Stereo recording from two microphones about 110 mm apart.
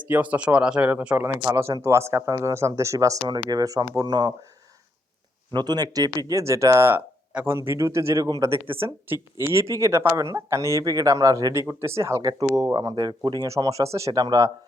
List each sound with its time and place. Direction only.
0.1 s speech: 15° right (ahead or behind); by 4.3 s 40° right (ahead or behind)
5.5 s speech: 40° right (ahead or behind)
14.1 s speech: 40° right (ahead or behind)